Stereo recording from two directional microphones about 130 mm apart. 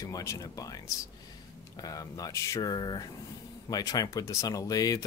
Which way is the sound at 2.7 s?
35° left (ahead or behind).